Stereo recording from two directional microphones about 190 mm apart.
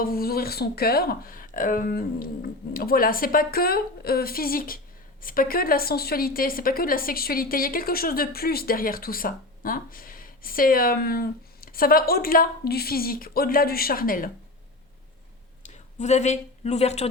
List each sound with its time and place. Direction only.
0.0 s a woman's voice: 50° left (ahead or behind)
15.6 s a woman's voice: 35° left (ahead or behind)